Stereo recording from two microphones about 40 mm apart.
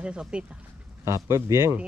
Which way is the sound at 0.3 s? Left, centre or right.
Right.